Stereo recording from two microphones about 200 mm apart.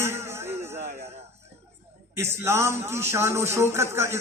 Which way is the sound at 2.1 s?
15° right (ahead or behind).